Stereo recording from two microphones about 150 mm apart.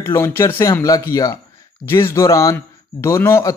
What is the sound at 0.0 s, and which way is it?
Speech, 15° left (ahead or behind).